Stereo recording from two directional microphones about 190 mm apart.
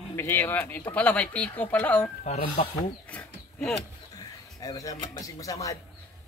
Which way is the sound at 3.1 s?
5° left (ahead or behind).